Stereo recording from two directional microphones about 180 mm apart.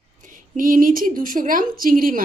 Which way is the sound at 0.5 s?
50° right (ahead or behind).